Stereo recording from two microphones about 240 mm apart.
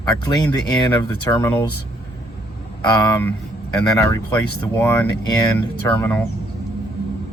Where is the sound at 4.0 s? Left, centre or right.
Centre.